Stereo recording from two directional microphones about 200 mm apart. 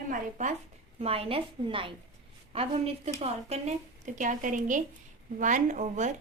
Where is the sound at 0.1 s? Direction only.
40° right (ahead or behind).